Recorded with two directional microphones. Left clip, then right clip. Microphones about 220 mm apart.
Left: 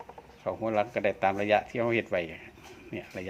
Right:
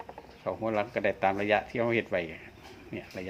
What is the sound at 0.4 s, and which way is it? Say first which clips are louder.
Speech: left 2 dB; 10° left (ahead or behind).